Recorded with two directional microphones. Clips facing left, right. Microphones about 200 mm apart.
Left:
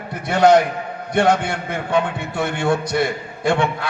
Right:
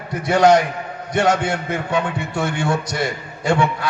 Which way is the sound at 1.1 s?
55° left (ahead or behind).